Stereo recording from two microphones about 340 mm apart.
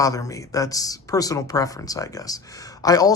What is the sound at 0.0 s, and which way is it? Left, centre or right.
Speech, centre.